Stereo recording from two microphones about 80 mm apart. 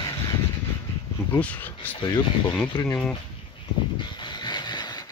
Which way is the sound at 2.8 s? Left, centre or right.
Left.